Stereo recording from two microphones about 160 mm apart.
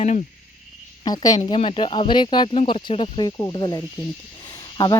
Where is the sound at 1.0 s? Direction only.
25° left (ahead or behind).